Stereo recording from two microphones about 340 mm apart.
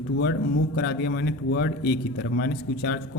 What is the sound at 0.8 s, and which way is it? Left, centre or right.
Speech, left.